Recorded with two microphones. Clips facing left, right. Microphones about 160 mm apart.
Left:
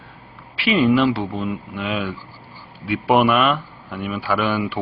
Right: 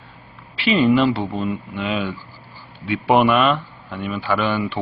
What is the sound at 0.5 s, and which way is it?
A man's voice, centre (ahead or behind).